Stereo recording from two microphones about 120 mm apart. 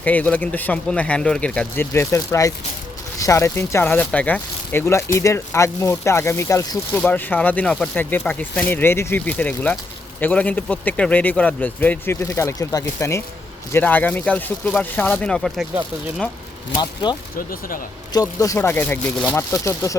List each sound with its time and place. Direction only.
0.0 s a man's voice: 15° left (ahead or behind)
7.0 s a man's voice: 15° left (ahead or behind)
16.7 s speech: 40° left (ahead or behind); by 18.9 s 15° left (ahead or behind)
19.1 s speech: 5° left (ahead or behind)
19.4 s speech: 25° left (ahead or behind)